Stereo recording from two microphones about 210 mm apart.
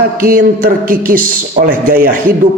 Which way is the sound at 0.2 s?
45° right (ahead or behind).